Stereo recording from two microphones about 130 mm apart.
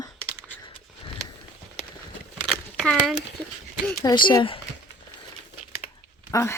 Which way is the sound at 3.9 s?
20° left (ahead or behind).